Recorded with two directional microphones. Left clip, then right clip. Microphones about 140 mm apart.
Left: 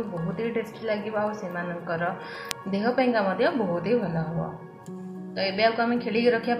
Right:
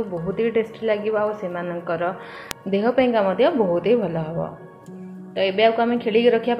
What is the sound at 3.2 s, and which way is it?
Speech, 25° right (ahead or behind).